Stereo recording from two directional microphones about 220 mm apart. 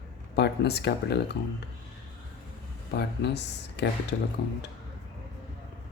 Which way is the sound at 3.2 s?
50° left (ahead or behind).